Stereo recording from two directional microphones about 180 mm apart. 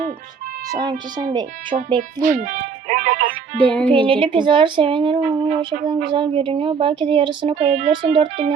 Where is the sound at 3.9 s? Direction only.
30° right (ahead or behind).